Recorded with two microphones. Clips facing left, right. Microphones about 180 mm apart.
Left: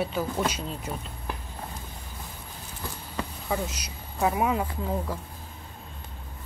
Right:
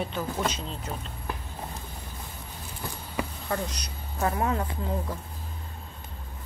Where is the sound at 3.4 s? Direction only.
5° left (ahead or behind).